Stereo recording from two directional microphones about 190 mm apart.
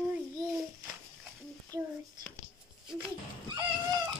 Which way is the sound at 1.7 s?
20° right (ahead or behind).